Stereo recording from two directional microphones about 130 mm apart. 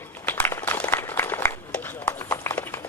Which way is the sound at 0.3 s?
15° left (ahead or behind).